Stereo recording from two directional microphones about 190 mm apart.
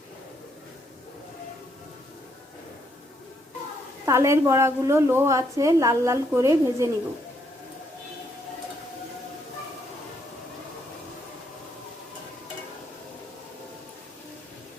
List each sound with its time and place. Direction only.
4.0 s a woman's voice: 15° right (ahead or behind)